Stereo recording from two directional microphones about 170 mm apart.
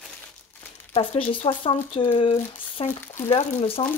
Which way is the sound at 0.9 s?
35° left (ahead or behind).